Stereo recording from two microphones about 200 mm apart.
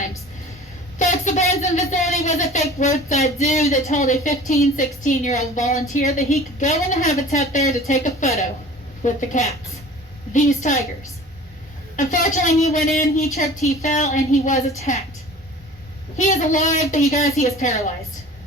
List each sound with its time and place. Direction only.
0.9 s a woman's voice: 35° left (ahead or behind)
11.9 s a woman's voice: 40° left (ahead or behind)
16.1 s a woman's voice: 40° left (ahead or behind)